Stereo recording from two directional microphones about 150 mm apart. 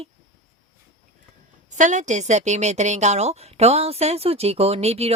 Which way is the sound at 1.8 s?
55° right (ahead or behind).